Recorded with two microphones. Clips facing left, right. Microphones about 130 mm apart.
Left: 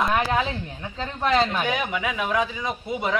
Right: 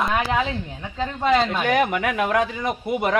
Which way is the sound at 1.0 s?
10° right (ahead or behind).